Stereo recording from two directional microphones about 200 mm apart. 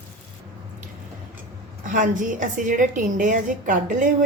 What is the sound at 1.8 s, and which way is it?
A woman's voice, 40° right (ahead or behind).